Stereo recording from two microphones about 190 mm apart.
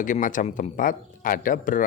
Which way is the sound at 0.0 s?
45° left (ahead or behind).